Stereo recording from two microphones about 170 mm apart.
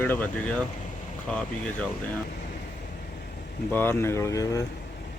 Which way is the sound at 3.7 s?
10° left (ahead or behind).